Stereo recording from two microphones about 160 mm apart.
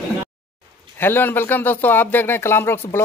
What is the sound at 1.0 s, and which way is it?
Speech, 15° left (ahead or behind).